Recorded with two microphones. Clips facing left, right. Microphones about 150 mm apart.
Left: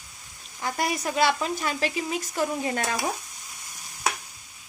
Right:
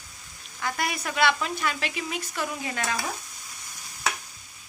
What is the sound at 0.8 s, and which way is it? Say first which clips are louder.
Speech: left 2 dB; 35° left (ahead or behind).